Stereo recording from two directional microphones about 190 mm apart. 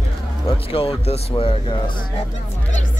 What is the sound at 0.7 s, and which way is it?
Speech, 30° left (ahead or behind).